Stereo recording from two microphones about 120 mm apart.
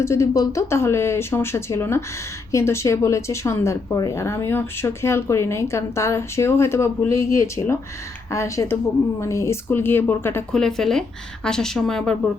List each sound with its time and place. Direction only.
0.0 s speech: 25° left (ahead or behind)
10.5 s speech: 5° left (ahead or behind)